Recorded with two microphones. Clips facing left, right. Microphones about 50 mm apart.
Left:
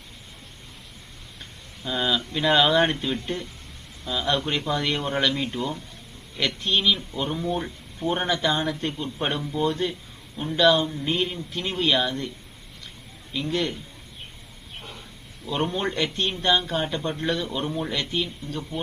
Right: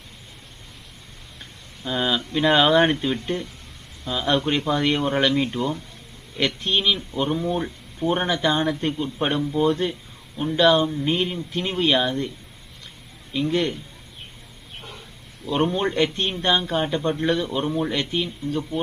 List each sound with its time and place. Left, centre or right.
1.8 s a man's voice: centre
5.5 s a man's voice: centre
13.4 s a man's voice: centre
14.8 s a sound: centre
15.5 s a man's voice: centre